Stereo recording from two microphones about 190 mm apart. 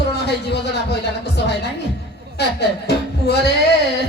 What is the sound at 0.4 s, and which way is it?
Speech, 60° left (ahead or behind).